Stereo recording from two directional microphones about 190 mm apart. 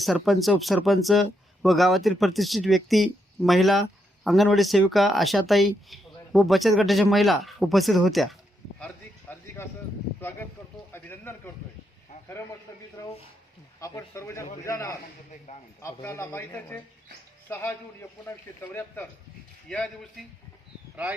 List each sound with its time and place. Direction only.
0.0 s speech: centre (ahead or behind)
9.3 s a sound: 10° left (ahead or behind)
10.9 s a man's voice: 10° left (ahead or behind)
13.0 s a man's voice: 15° left (ahead or behind)
20.9 s speech: 10° right (ahead or behind)